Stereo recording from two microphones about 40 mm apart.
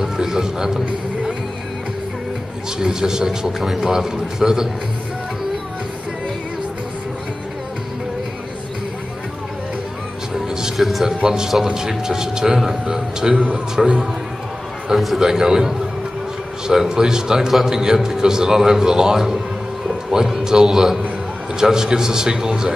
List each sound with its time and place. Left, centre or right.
0.0 s a man's voice: centre
2.8 s a man's voice: centre
10.3 s music: centre
10.8 s a man's voice: centre
11.2 s a man's voice: centre
13.8 s a man's voice: centre
15.1 s a man's voice: centre